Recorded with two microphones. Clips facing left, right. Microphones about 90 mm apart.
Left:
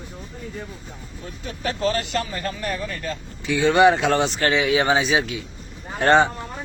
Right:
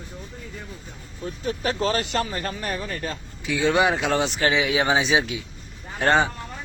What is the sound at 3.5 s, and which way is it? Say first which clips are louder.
Speech: left 5 dB; 5° right (ahead or behind).